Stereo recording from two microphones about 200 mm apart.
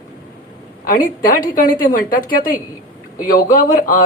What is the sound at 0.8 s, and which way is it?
A woman's voice, 45° left (ahead or behind).